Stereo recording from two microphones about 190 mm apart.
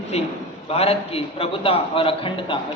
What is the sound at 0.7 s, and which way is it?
A man's voice, 30° left (ahead or behind).